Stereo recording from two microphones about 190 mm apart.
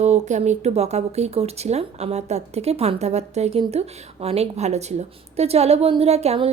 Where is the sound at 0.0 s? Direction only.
35° right (ahead or behind).